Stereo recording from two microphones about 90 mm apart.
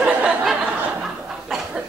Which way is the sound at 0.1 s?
15° right (ahead or behind).